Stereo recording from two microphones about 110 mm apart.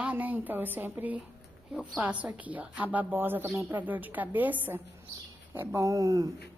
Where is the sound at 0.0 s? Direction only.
15° right (ahead or behind); by 6.3 s 35° right (ahead or behind).